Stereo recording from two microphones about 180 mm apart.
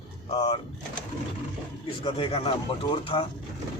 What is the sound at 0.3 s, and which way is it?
Speech, 35° left (ahead or behind).